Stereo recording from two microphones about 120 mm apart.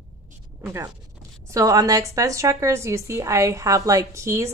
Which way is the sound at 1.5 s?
30° right (ahead or behind).